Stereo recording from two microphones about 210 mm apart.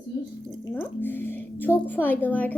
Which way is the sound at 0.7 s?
10° left (ahead or behind).